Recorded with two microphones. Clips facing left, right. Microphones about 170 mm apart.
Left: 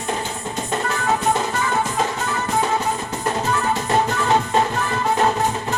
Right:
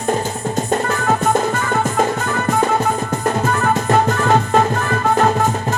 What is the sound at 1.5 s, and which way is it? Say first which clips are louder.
Music: right 4 dB; 50° right (ahead or behind).